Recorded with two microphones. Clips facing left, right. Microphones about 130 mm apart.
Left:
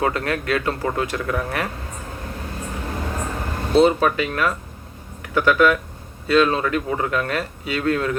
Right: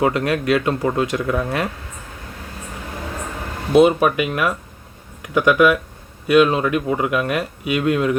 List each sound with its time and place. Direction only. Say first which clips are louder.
0.0 s speech: right 4 dB; 20° right (ahead or behind)
3.7 s speech: right 3 dB; 15° right (ahead or behind)